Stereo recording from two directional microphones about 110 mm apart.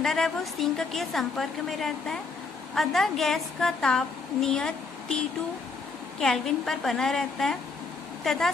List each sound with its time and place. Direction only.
0.0 s a woman's voice: 5° left (ahead or behind)